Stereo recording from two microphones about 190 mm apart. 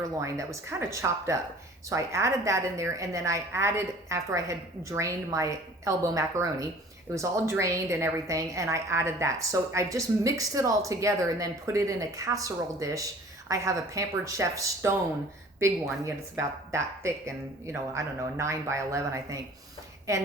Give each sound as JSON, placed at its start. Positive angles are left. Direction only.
{"t": 0.2, "sound": "a woman's voice", "side_deg": -15}